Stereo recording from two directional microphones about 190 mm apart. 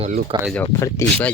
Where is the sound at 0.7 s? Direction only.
15° left (ahead or behind).